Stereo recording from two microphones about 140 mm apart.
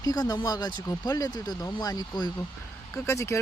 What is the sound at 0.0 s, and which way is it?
Speech, 25° left (ahead or behind).